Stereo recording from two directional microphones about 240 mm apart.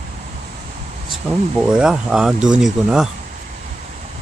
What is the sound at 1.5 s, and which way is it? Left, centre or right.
Speech, centre.